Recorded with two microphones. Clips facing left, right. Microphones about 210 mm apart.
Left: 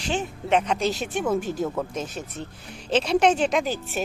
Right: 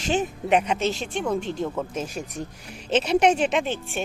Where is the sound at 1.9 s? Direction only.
10° right (ahead or behind).